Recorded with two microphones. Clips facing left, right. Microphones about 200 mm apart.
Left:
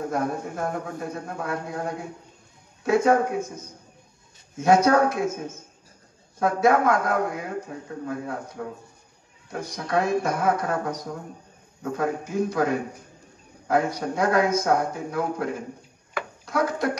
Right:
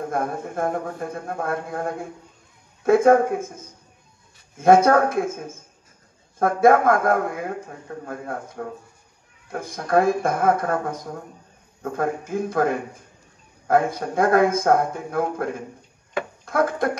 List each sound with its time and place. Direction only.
0.1 s a man's voice: 50° right (ahead or behind)